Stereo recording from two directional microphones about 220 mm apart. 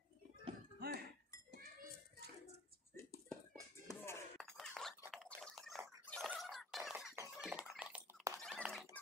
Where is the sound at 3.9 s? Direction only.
10° left (ahead or behind).